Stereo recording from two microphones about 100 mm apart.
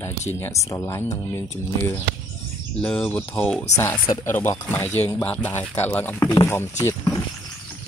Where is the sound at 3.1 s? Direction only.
20° left (ahead or behind).